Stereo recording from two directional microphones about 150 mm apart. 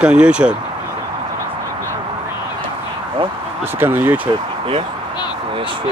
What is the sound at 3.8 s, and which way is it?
Speech, 15° right (ahead or behind).